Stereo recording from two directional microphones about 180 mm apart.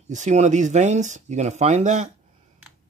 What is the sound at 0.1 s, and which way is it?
Speech, 40° right (ahead or behind).